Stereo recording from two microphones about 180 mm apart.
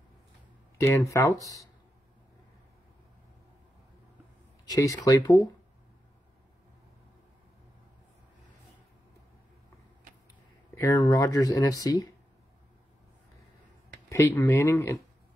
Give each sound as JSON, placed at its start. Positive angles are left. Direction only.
{"t": 0.7, "sound": "speech", "side_deg": 15}
{"t": 4.6, "sound": "speech", "side_deg": 20}
{"t": 10.7, "sound": "speech", "side_deg": 20}
{"t": 14.0, "sound": "speech", "side_deg": 15}